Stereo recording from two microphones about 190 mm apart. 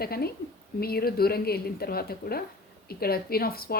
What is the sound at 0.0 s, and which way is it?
Speech, 55° left (ahead or behind).